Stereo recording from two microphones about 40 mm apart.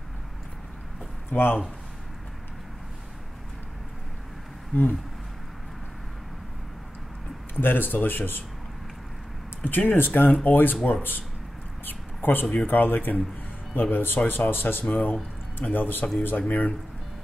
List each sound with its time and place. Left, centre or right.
1.3 s speech: left
4.7 s speech: left
7.5 s speech: left
9.7 s speech: left
11.8 s a sound: left
12.6 s speech: left
14.0 s speech: left
14.9 s speech: left